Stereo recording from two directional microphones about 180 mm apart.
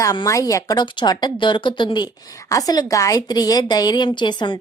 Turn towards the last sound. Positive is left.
turn(degrees=25)  # may be behind; listen again after turning